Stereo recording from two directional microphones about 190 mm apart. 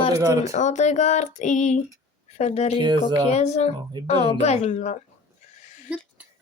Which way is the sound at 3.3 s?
35° left (ahead or behind).